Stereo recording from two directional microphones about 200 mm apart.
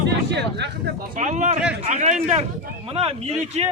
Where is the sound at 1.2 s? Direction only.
35° right (ahead or behind).